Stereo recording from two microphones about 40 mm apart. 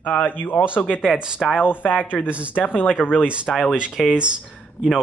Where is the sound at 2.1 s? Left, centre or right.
Centre.